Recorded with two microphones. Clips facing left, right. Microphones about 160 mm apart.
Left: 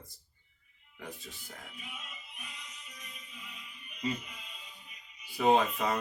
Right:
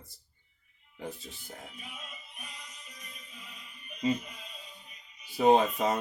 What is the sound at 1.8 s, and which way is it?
Speech, 40° right (ahead or behind).